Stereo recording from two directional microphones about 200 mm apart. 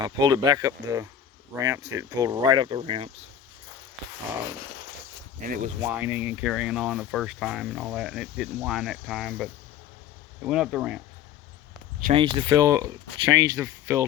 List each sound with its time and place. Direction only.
0.0 s speech: 20° right (ahead or behind)
5.8 s speech: 10° right (ahead or behind)
12.1 s speech: 25° right (ahead or behind)